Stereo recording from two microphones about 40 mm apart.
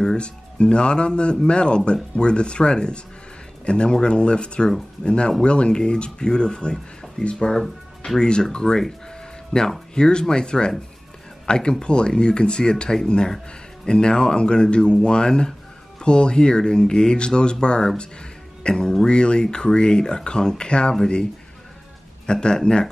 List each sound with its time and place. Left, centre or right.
0.0 s speech: centre
22.2 s speech: left